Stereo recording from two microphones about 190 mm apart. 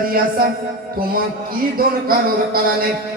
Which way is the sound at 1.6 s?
50° right (ahead or behind).